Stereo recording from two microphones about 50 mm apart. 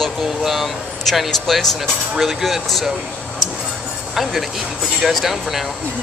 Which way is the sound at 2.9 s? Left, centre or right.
Right.